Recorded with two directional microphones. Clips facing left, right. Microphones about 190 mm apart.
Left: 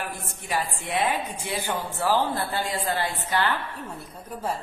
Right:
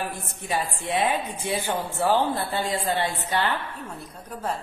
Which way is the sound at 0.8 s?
20° right (ahead or behind).